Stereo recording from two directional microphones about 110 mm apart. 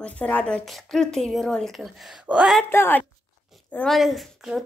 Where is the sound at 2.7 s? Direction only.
20° left (ahead or behind).